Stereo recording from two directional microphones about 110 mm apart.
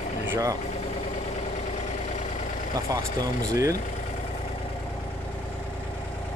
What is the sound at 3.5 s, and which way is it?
Speech, 30° right (ahead or behind).